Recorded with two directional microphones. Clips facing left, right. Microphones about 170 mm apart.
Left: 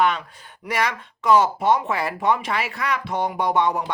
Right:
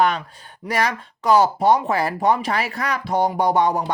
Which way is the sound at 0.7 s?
35° right (ahead or behind).